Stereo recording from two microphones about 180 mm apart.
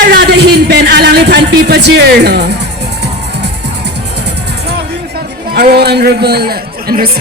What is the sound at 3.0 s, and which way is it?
Music, 70° right (ahead or behind).